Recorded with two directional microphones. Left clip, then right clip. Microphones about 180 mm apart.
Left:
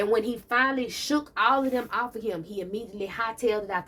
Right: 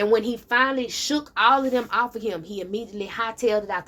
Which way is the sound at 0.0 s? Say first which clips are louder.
Right 4 dB; 35° right (ahead or behind).